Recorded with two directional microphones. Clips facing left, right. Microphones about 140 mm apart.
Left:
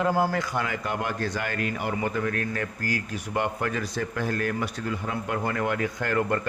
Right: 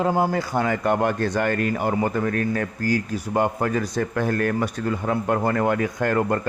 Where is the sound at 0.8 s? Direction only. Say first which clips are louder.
Right 8 dB; 50° right (ahead or behind).